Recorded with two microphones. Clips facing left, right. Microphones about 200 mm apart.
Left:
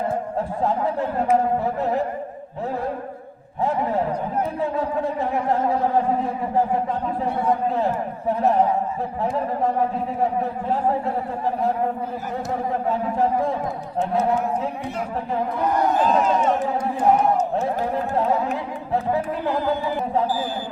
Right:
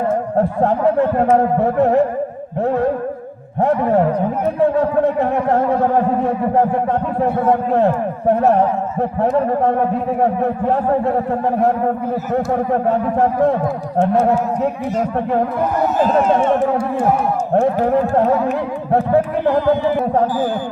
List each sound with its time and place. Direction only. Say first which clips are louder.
0.3 s speech: right 9 dB; 65° right (ahead or behind)
16.0 s speech: right 5 dB; 55° right (ahead or behind)
17.5 s speech: right 9 dB; 60° right (ahead or behind)